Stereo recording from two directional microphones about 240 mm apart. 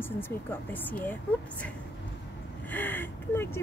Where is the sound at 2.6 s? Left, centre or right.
Centre.